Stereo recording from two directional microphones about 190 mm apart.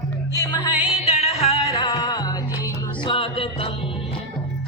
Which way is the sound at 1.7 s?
20° left (ahead or behind).